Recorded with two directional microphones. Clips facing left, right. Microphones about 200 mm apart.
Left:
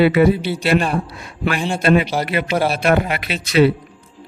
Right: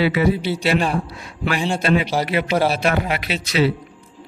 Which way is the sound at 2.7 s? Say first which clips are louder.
Left 3 dB; 55° left (ahead or behind).